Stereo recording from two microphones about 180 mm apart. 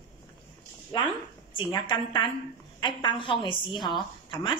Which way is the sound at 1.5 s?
25° left (ahead or behind).